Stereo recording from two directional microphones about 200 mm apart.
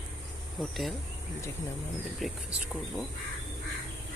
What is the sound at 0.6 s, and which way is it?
Speech, centre (ahead or behind).